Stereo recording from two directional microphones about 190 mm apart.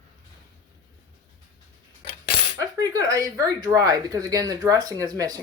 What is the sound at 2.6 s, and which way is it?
Speech, 20° right (ahead or behind).